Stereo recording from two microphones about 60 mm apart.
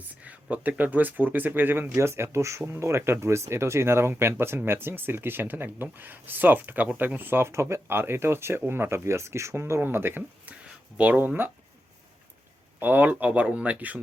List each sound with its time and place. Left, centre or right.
0.5 s speech: right
2.0 s speech: right
7.4 s speech: right
10.9 s speech: right
12.8 s speech: right